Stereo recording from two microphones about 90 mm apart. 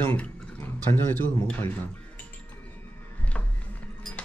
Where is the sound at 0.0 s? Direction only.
20° left (ahead or behind).